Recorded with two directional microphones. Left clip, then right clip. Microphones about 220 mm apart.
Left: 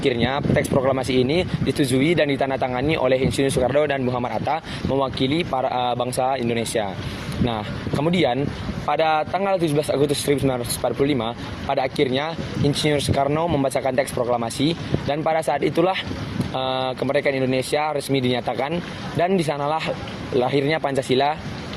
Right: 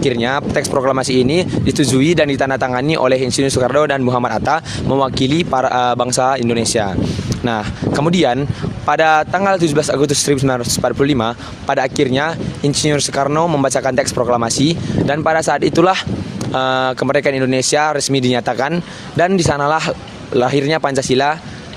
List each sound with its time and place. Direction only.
0.1 s speech: 40° right (ahead or behind)